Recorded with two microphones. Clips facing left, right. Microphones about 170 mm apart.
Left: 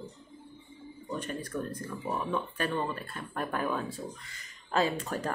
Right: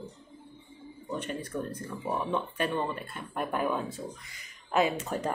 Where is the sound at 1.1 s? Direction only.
20° right (ahead or behind).